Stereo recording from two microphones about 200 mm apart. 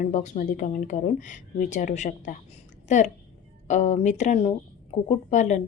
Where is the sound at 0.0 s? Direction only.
35° left (ahead or behind).